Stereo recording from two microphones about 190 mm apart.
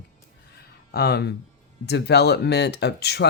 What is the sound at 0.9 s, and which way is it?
Speech, 55° left (ahead or behind).